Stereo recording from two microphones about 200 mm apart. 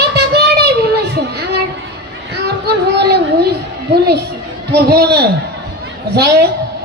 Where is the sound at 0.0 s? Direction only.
55° right (ahead or behind).